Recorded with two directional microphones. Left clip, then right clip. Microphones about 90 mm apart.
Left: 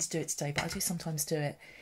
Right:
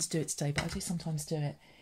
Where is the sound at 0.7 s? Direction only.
25° left (ahead or behind).